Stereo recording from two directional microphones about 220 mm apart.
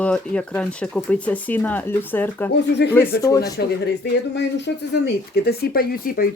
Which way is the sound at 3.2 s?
15° left (ahead or behind).